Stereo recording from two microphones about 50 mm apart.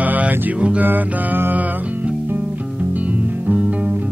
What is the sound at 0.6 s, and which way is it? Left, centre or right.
Music, right.